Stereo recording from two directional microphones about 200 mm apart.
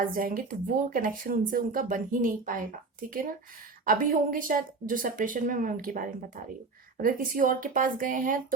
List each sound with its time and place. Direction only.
0.0 s a woman's voice: 45° right (ahead or behind)